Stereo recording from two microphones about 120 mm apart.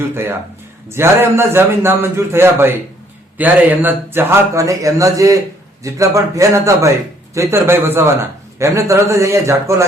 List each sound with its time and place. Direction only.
0.1 s speech: 20° right (ahead or behind)